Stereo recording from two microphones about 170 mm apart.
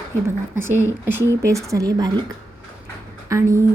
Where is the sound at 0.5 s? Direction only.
15° right (ahead or behind).